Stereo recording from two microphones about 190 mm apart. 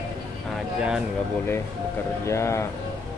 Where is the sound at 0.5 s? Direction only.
5° right (ahead or behind).